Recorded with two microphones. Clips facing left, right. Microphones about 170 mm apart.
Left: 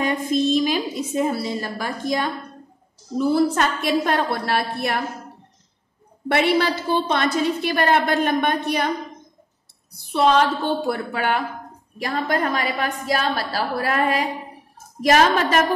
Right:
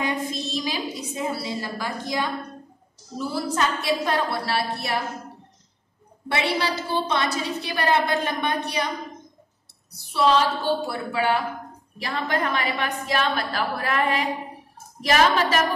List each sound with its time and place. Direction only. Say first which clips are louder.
0.0 s a woman's voice: left 7 dB; 50° left (ahead or behind)
6.2 s a woman's voice: left 6 dB; 55° left (ahead or behind)
10.1 s a woman's voice: left 3 dB; 55° left (ahead or behind)